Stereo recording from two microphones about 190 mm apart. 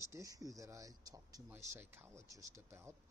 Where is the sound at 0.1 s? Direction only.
20° right (ahead or behind).